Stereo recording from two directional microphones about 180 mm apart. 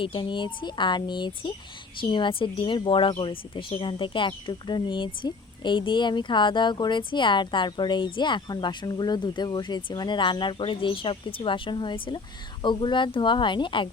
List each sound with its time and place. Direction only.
0.0 s speech: 30° left (ahead or behind)